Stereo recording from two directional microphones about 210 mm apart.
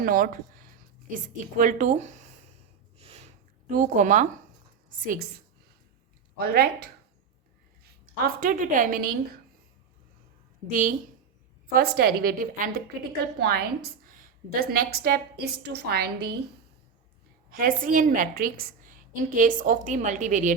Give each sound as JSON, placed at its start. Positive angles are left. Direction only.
{"t": 0.0, "sound": "a woman's voice", "side_deg": -40}
{"t": 3.0, "sound": "a sound", "side_deg": -30}
{"t": 5.0, "sound": "a woman's voice", "side_deg": -45}
{"t": 6.3, "sound": "a woman's voice", "side_deg": -45}
{"t": 8.2, "sound": "a woman's voice", "side_deg": -40}
{"t": 10.7, "sound": "a woman's voice", "side_deg": -40}
{"t": 17.5, "sound": "a woman's voice", "side_deg": -40}